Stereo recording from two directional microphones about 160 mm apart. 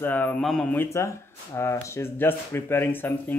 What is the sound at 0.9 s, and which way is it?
Speech, 15° left (ahead or behind).